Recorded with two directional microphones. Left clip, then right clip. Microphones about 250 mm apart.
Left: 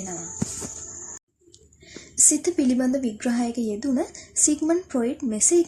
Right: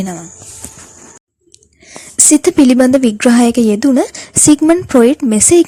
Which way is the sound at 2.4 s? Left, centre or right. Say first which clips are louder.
Right 14 dB; right.